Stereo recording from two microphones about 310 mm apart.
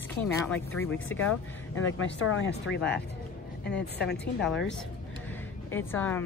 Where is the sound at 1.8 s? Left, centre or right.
Left.